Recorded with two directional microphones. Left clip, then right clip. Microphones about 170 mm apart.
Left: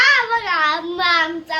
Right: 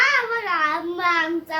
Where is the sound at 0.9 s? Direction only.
Centre (ahead or behind).